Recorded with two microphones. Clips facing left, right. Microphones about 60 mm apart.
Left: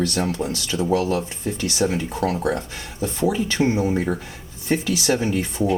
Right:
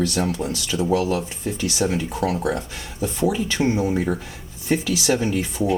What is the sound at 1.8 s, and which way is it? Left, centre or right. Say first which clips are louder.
Speech: left 1 dB; centre.